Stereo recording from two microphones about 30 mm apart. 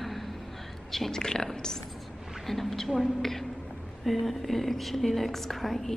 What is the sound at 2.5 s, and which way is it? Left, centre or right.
A woman's voice, centre.